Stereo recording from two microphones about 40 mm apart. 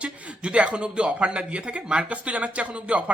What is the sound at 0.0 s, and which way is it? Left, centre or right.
A man's voice, right.